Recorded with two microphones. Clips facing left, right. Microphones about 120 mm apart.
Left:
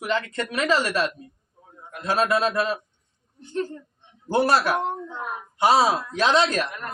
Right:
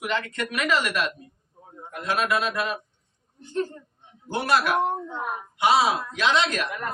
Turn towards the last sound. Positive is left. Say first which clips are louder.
# left 3 dB
turn(degrees=40)  # may be behind; listen again after turning